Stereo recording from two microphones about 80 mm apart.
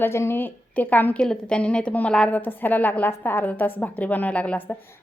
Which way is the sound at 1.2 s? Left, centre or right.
Centre.